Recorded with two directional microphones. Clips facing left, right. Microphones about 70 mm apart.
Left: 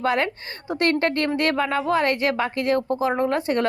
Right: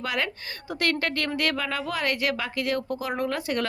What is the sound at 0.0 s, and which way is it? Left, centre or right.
Speech, left.